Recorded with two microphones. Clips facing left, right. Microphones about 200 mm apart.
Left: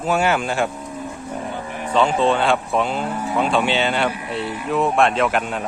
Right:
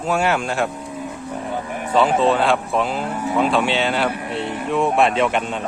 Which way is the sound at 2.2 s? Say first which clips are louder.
Right 1 dB; centre (ahead or behind).